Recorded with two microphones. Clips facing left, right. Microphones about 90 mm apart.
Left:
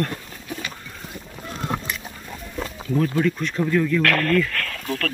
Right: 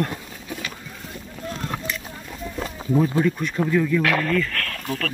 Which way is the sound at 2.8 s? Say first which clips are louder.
Right 1 dB; 15° right (ahead or behind).